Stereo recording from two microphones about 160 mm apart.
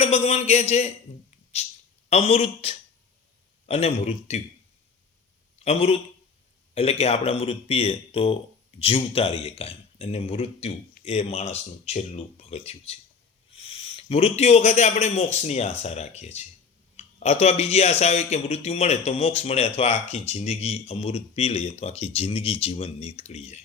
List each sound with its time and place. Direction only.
0.0 s a man's voice: 45° left (ahead or behind)
1.6 s a sound: 40° left (ahead or behind)
2.0 s speech: 40° left (ahead or behind)
5.6 s a man's voice: 40° left (ahead or behind)